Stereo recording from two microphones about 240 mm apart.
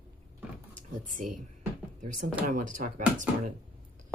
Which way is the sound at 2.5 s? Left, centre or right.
Right.